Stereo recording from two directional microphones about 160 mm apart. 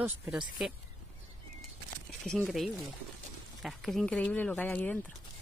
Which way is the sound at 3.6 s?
Centre (ahead or behind).